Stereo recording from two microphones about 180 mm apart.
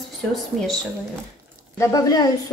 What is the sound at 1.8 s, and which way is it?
Speech, 20° left (ahead or behind).